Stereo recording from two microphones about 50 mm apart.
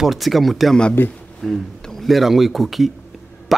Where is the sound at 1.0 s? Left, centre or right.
Left.